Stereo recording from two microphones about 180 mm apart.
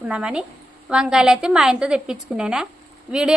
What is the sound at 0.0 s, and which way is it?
A woman's voice, 5° right (ahead or behind).